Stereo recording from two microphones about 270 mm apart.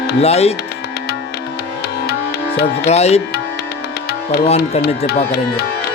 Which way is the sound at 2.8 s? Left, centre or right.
Left.